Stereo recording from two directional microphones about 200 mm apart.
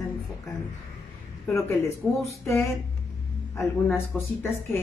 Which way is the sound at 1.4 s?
15° left (ahead or behind).